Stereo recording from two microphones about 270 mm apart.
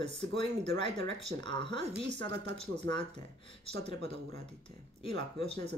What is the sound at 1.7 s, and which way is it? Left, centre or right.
Speech, right.